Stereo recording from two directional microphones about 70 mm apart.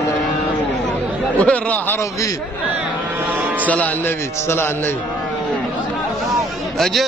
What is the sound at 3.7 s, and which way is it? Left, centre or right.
A man's voice, left.